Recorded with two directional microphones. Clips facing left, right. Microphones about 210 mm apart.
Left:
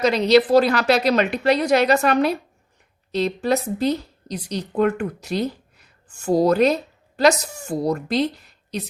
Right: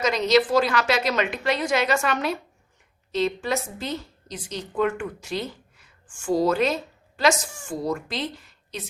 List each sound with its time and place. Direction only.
0.0 s a woman's voice: 35° left (ahead or behind)